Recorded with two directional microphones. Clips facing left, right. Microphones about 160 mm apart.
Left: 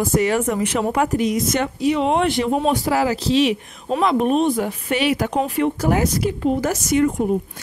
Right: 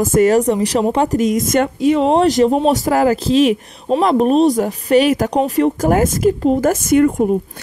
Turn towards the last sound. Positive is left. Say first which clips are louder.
# right 5 dB
turn(degrees=-50)  # may be behind; listen again after turning